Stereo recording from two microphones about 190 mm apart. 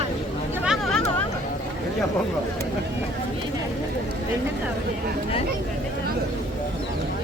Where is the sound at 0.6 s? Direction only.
Centre (ahead or behind).